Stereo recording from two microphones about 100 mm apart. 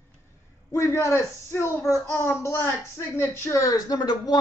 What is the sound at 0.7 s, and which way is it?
A man's voice, 30° left (ahead or behind).